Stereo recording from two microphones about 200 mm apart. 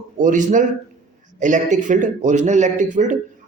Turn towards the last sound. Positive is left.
turn(degrees=-35)  # may be behind; listen again after turning